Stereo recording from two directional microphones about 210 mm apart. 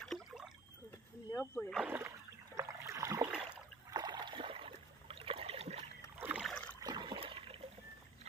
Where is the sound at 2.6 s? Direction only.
15° right (ahead or behind).